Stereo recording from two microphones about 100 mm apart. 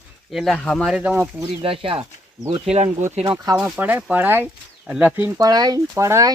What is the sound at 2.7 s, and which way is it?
Speech, 85° right.